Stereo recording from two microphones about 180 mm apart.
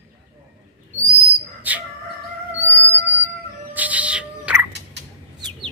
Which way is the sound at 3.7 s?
10° right (ahead or behind).